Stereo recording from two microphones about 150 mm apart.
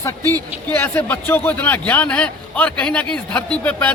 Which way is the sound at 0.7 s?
15° left (ahead or behind).